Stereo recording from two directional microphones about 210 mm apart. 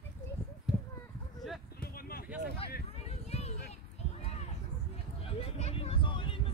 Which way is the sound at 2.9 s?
30° left (ahead or behind).